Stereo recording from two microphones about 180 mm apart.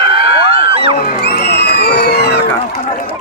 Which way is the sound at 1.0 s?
65° left (ahead or behind).